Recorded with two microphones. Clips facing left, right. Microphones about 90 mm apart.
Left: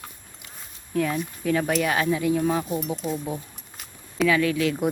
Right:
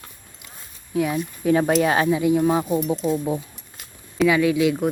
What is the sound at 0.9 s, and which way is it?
Speech, 10° right (ahead or behind).